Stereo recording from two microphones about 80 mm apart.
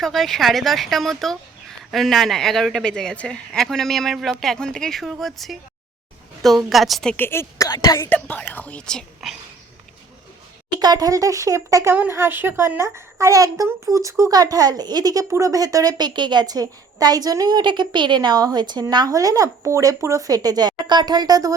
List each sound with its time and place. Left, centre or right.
0.0 s speech: centre
7.2 s a woman's voice: left
7.6 s a woman's voice: left
8.1 s speech: centre
10.7 s a woman's voice: right
15.3 s a woman's voice: right
18.3 s speech: right